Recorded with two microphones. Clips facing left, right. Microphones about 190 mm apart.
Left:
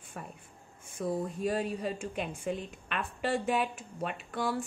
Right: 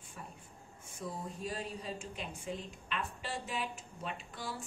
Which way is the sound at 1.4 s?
60° left (ahead or behind).